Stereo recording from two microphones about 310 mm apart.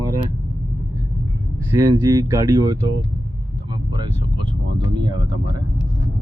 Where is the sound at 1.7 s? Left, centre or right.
Centre.